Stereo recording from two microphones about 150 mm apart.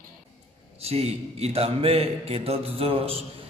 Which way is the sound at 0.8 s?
45° right (ahead or behind).